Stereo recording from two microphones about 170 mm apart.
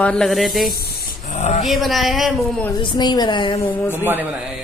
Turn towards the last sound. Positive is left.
turn(degrees=-10)  # may be behind; listen again after turning